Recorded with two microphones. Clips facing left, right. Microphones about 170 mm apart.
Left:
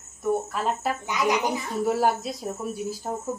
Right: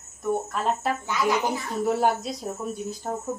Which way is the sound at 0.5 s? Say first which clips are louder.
Right 1 dB; centre (ahead or behind).